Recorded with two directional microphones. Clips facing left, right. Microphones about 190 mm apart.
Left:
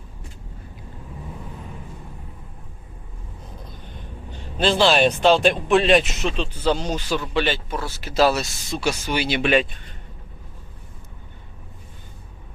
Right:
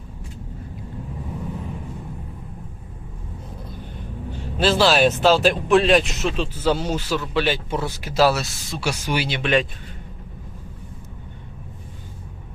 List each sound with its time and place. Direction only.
4.3 s speech: 5° right (ahead or behind)
7.7 s speech: 20° right (ahead or behind)
9.2 s speech: 10° left (ahead or behind)